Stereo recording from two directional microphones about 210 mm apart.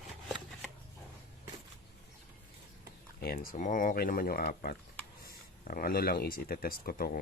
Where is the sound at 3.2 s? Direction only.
45° left (ahead or behind).